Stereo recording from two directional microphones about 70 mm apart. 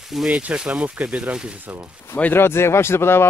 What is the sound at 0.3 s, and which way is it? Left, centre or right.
Speech, centre.